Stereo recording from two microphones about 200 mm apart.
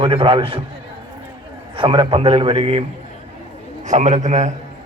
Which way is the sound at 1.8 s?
25° right (ahead or behind).